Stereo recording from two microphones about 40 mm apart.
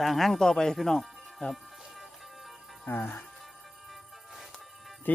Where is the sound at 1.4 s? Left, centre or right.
Left.